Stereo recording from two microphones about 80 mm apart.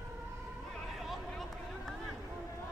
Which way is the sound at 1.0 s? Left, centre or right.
Centre.